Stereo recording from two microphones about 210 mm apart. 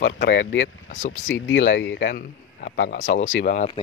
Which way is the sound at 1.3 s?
60° left (ahead or behind).